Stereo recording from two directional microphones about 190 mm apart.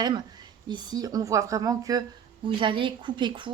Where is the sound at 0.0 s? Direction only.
20° right (ahead or behind).